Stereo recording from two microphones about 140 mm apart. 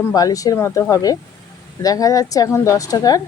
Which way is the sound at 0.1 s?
25° left (ahead or behind).